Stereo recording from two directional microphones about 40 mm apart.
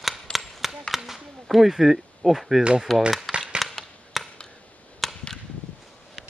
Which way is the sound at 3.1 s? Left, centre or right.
Centre.